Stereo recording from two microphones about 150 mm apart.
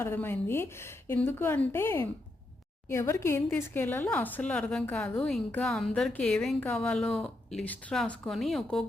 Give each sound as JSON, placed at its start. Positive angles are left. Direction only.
{"t": 0.0, "sound": "speech", "side_deg": 15}